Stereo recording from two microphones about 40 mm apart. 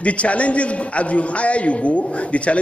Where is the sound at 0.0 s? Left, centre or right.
Left.